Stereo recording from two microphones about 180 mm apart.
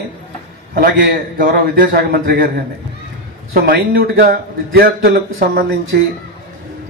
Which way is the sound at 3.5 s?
60° right (ahead or behind).